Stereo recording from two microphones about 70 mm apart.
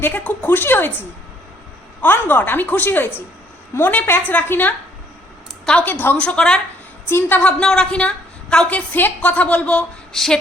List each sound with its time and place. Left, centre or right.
0.0 s a woman's voice: left
2.0 s a woman's voice: left
5.8 s a woman's voice: left
6.1 s a woman's voice: centre
7.1 s a woman's voice: left
7.6 s a woman's voice: centre
10.2 s a woman's voice: centre